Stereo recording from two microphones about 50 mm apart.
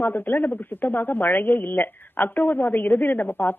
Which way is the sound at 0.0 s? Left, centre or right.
Left.